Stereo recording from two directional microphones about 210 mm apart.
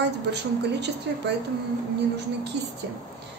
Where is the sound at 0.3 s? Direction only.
55° right (ahead or behind).